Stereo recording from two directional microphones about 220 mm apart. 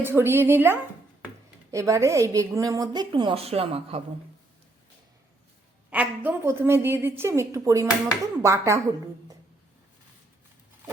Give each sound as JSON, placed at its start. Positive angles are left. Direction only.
{"t": 0.0, "sound": "a woman's voice", "side_deg": -10}
{"t": 5.9, "sound": "a woman's voice", "side_deg": -5}